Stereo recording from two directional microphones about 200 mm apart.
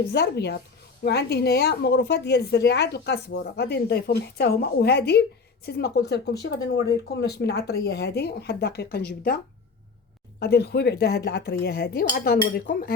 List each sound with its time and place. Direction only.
0.1 s a woman's voice: 55° left (ahead or behind)
10.4 s speech: 55° left (ahead or behind)